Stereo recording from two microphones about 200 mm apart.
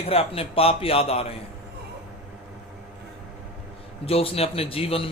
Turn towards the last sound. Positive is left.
turn(degrees=30)  # may be behind; listen again after turning